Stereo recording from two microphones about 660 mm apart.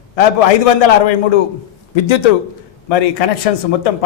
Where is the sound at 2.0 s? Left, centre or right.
Left.